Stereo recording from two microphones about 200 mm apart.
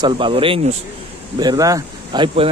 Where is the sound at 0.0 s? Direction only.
25° right (ahead or behind).